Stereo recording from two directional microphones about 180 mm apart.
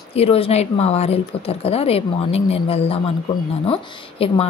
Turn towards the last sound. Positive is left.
turn(degrees=30)  # may be behind; listen again after turning